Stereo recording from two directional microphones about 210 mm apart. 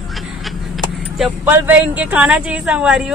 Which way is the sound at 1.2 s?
10° right (ahead or behind).